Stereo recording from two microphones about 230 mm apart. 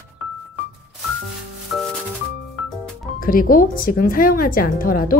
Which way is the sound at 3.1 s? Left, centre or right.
Left.